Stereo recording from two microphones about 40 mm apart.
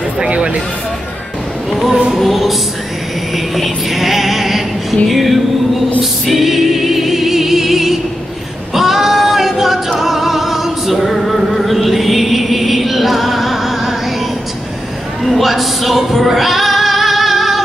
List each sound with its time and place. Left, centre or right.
0.3 s music: right
1.7 s a sound: centre
2.1 s music: centre
3.3 s a sound: centre
6.2 s choir: centre
8.7 s female singing: centre
9.9 s music: centre
15.2 s singing: centre